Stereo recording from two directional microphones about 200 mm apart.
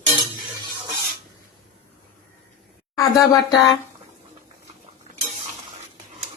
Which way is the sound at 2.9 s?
15° left (ahead or behind).